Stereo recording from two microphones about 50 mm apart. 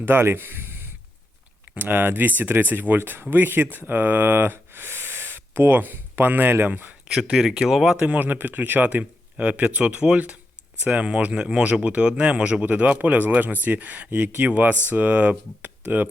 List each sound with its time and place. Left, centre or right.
0.0 s speech: right
4.5 s gasp: right
5.8 s speech: right
7.7 s speech: centre
7.9 s speech: right